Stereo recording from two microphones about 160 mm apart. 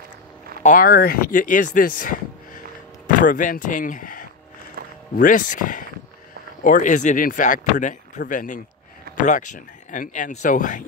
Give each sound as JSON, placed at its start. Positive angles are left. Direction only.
{"t": 0.6, "sound": "speech", "side_deg": 55}
{"t": 4.8, "sound": "music", "side_deg": -70}
{"t": 5.1, "sound": "speech", "side_deg": 55}